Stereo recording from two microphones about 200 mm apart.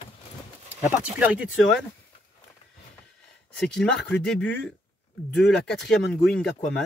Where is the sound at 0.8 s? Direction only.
10° right (ahead or behind).